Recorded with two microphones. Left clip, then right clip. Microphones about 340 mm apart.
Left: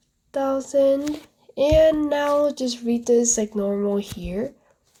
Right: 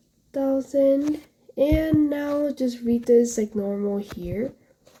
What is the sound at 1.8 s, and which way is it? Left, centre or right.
Speech, left.